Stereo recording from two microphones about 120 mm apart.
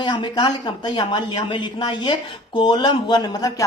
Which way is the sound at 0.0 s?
40° left (ahead or behind).